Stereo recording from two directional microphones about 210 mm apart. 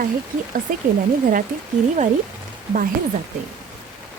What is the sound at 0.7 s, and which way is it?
Speech, 40° right (ahead or behind).